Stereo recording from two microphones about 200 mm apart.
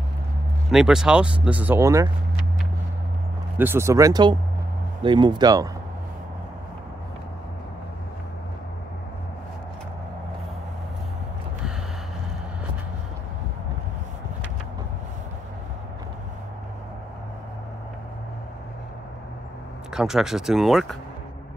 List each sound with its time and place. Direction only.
0.7 s speech: centre (ahead or behind)
3.5 s speech: 10° right (ahead or behind)
19.9 s speech: 5° right (ahead or behind)